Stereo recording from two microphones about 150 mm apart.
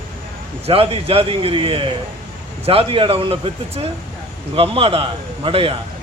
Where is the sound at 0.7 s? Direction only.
40° right (ahead or behind).